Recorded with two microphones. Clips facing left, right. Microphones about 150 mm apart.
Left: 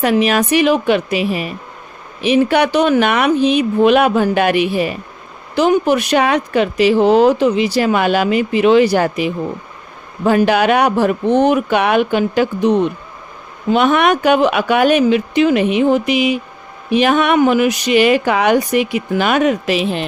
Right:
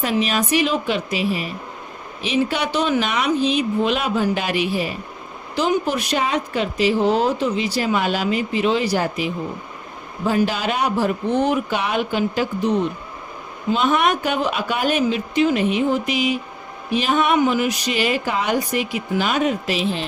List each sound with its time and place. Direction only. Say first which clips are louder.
0.0 s speech: left 7 dB; 65° left (ahead or behind)